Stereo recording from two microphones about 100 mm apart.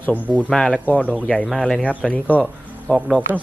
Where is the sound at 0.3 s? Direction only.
10° left (ahead or behind).